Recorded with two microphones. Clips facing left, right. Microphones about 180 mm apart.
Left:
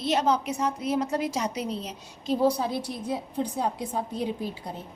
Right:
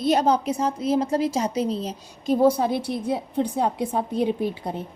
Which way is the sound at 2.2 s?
50° right (ahead or behind).